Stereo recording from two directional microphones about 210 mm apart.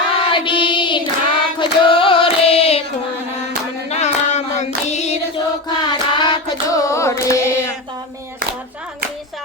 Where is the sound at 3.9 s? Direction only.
35° left (ahead or behind).